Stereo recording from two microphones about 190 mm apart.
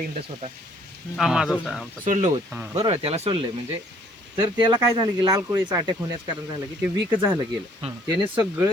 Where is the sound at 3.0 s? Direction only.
30° right (ahead or behind).